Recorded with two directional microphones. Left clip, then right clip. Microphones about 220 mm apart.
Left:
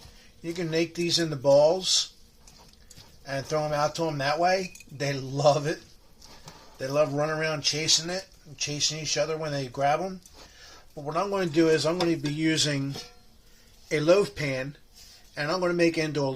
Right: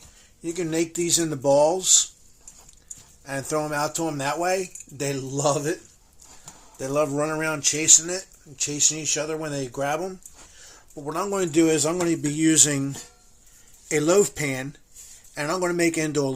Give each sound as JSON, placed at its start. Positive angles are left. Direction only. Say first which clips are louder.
{"t": 0.4, "sound": "speech", "louder": "right 2 dB", "side_deg": -50}
{"t": 3.2, "sound": "speech", "louder": "right 1 dB", "side_deg": -50}
{"t": 6.7, "sound": "a man's voice", "louder": "right 1 dB", "side_deg": -50}